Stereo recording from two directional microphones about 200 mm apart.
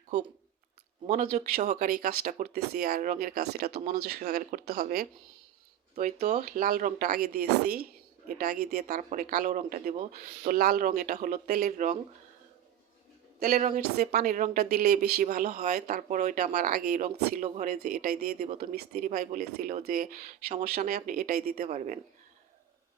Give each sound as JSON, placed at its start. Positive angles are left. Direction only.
{"t": 1.0, "sound": "speech", "side_deg": -40}
{"t": 5.9, "sound": "speech", "side_deg": -35}
{"t": 13.4, "sound": "speech", "side_deg": -35}
{"t": 17.0, "sound": "speech", "side_deg": -35}
{"t": 17.8, "sound": "speech", "side_deg": -50}